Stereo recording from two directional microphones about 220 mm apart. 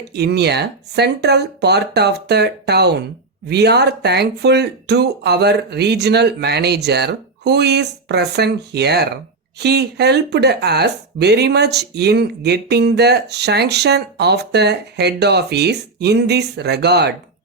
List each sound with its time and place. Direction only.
0.0 s speech: 50° right (ahead or behind)